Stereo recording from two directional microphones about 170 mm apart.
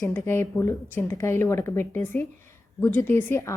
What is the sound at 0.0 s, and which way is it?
A woman's voice, 15° left (ahead or behind).